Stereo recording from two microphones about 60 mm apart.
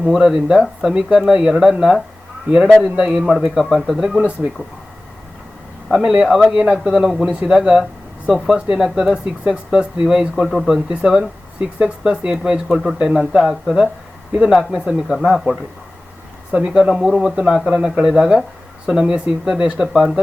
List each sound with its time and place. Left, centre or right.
0.1 s speech: centre
2.8 s speech: centre
4.2 s speech: right
5.9 s speech: centre
9.1 s speech: centre
14.3 s speech: centre
16.5 s speech: centre
16.9 s speech: centre
17.2 s speech: centre
17.4 s speech: centre
19.8 s speech: centre